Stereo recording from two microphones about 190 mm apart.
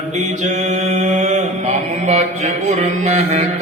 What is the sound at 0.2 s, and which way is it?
Mantra, 35° right (ahead or behind).